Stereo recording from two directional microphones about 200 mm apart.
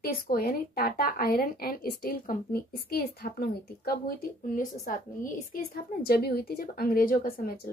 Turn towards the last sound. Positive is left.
turn(degrees=45)  # may be behind; listen again after turning